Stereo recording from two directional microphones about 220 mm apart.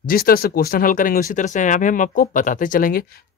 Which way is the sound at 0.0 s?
40° left (ahead or behind).